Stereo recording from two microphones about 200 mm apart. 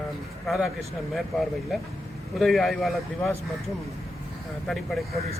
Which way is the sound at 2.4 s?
Centre (ahead or behind).